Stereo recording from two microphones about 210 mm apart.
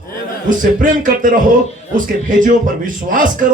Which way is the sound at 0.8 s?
40° right (ahead or behind).